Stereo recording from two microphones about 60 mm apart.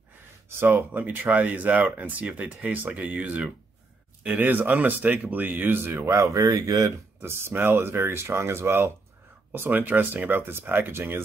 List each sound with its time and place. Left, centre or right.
0.6 s speech: right
6.0 s speech: right
7.2 s speech: right
9.5 s speech: right